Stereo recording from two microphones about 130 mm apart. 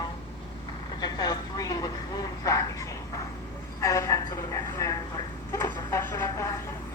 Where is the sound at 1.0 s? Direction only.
30° left (ahead or behind).